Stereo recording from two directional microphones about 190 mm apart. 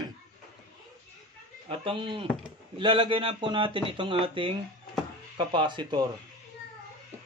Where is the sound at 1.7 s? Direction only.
25° right (ahead or behind).